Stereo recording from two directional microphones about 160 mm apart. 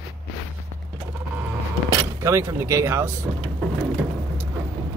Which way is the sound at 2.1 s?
15° right (ahead or behind).